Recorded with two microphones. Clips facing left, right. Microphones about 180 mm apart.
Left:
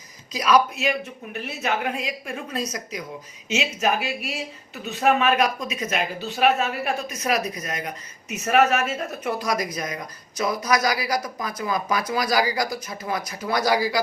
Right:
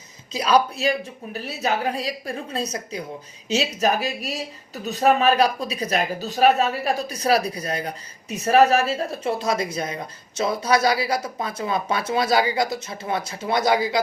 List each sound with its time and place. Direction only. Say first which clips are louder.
0.3 s speech: even; 30° right (ahead or behind)